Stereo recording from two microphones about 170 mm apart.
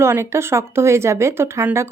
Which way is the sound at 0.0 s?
15° right (ahead or behind).